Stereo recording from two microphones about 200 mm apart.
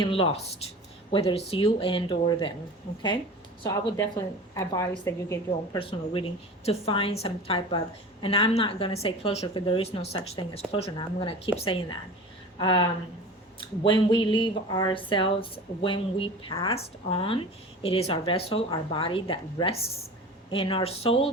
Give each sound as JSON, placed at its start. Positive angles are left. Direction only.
{"t": 0.0, "sound": "speech", "side_deg": 25}
{"t": 3.6, "sound": "a woman's voice", "side_deg": 20}
{"t": 5.5, "sound": "speech", "side_deg": 25}
{"t": 12.5, "sound": "a sound", "side_deg": 20}
{"t": 13.6, "sound": "speech", "side_deg": 25}